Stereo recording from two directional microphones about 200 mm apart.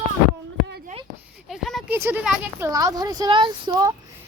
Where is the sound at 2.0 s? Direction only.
10° right (ahead or behind).